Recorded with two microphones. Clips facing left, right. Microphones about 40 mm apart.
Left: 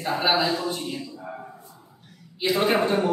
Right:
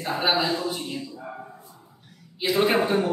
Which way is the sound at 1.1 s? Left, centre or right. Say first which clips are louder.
Left 1 dB; centre.